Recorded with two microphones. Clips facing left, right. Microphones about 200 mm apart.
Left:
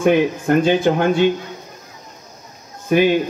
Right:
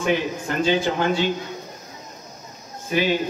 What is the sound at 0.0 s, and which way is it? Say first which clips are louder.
Speech: left 7 dB; 55° left (ahead or behind).